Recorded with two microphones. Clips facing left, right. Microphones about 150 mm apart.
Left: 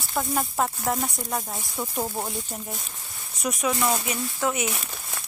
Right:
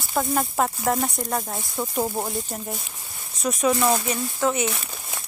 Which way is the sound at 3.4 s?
10° left (ahead or behind).